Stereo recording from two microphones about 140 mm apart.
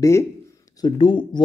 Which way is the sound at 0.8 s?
35° left (ahead or behind).